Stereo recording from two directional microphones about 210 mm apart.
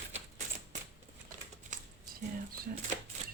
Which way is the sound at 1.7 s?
35° right (ahead or behind).